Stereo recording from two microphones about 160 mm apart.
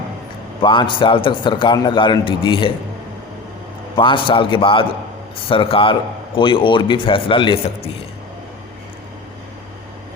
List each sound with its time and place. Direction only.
0.6 s a man's voice: 30° left (ahead or behind)
3.9 s a man's voice: 30° left (ahead or behind)